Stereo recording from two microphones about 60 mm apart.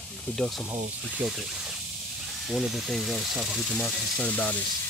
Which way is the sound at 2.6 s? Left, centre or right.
Centre.